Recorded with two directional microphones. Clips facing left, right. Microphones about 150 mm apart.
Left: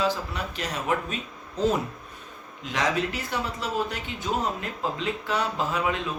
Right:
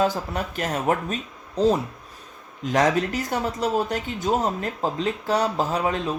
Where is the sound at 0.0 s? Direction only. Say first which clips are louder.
Right 4 dB; 45° right (ahead or behind).